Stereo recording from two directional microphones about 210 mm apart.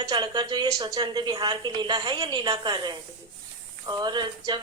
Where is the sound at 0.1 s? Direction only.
20° right (ahead or behind).